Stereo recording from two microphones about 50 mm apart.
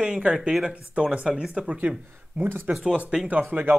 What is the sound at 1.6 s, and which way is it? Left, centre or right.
Speech, right.